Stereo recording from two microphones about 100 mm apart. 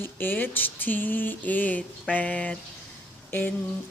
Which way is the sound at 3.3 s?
20° left (ahead or behind).